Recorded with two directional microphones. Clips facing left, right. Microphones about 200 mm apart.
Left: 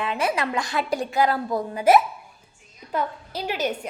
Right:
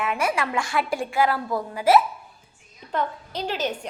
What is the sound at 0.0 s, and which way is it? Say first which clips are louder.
A woman's voice: even; 30° left (ahead or behind).